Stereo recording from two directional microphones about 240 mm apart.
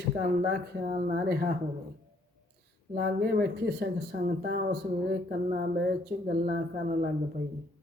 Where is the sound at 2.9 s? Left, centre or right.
Right.